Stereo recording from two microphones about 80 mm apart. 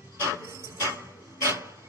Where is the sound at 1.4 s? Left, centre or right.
Right.